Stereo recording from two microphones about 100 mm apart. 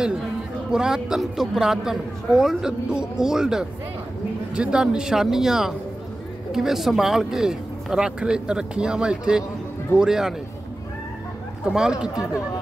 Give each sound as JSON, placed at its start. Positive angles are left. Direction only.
{"t": 0.0, "sound": "a man's voice", "side_deg": -5}
{"t": 11.6, "sound": "speech", "side_deg": -5}